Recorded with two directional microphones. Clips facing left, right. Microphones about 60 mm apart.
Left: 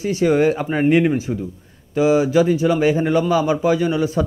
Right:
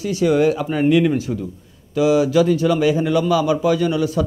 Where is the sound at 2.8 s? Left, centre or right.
Left.